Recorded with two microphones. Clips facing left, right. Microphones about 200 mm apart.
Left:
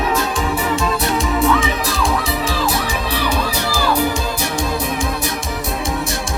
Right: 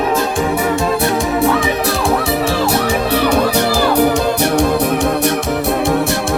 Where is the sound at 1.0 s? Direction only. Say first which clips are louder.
Even; 60° right (ahead or behind).